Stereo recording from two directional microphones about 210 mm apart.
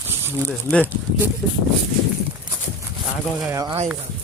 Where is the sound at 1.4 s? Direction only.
Centre (ahead or behind).